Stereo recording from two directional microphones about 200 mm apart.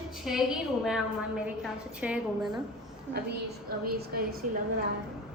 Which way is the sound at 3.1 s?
50° right (ahead or behind).